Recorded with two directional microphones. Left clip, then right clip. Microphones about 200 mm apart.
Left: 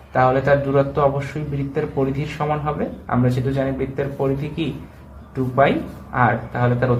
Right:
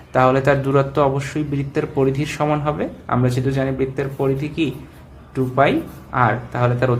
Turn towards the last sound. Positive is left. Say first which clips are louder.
# right 1 dB
turn(degrees=-35)  # may be behind; listen again after turning